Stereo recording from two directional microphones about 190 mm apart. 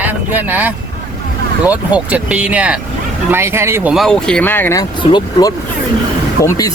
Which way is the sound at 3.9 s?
Centre (ahead or behind).